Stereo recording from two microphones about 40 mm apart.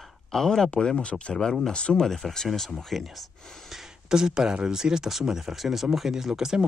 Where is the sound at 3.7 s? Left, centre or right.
Centre.